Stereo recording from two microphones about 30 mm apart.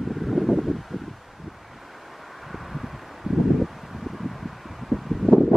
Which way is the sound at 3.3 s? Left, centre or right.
Centre.